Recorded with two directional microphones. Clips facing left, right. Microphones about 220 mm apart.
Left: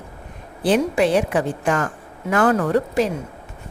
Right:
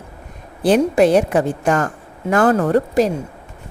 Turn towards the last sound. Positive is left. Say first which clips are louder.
# right 4 dB
turn(degrees=-40)  # may be behind; listen again after turning